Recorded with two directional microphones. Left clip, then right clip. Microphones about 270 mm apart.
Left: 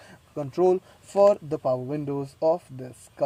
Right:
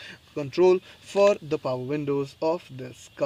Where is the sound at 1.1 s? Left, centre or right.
Centre.